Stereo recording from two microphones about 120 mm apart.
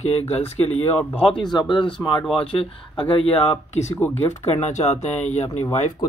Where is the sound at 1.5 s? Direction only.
40° left (ahead or behind); by 3.9 s 60° left (ahead or behind).